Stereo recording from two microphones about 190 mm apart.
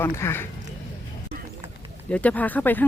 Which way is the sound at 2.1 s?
5° left (ahead or behind).